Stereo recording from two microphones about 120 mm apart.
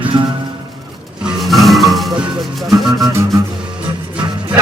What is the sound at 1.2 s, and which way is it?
Music, centre (ahead or behind).